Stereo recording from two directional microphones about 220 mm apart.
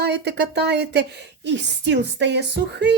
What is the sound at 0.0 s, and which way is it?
A woman's voice, 50° right (ahead or behind).